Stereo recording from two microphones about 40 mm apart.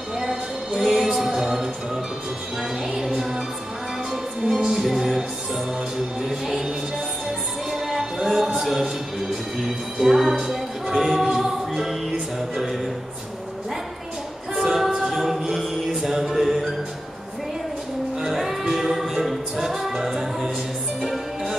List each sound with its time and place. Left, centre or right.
0.2 s music: centre
2.9 s music: centre
6.2 s music: centre
7.7 s music: centre
14.6 s a capella: centre
16.2 s music: centre
18.2 s music: centre